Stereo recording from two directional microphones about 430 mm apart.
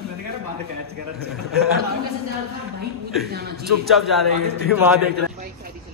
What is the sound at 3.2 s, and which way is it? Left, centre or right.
Speech, right.